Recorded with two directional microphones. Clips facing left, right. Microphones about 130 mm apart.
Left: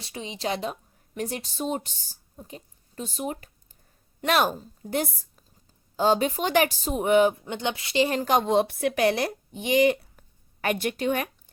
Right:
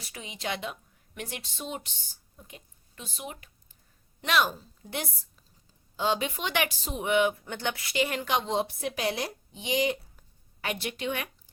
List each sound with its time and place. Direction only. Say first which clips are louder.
0.0 s a woman's voice: left 6 dB; 30° left (ahead or behind)
7.3 s a woman's voice: left 4 dB; 20° left (ahead or behind); by 11.3 s 45° left (ahead or behind)